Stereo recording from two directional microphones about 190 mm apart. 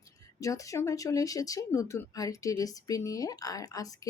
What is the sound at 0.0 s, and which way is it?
Speech, 15° left (ahead or behind).